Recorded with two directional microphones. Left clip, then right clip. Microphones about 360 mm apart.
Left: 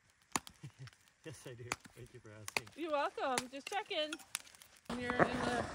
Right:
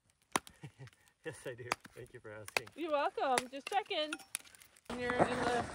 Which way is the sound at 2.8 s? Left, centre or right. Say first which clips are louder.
Right 2 dB; right.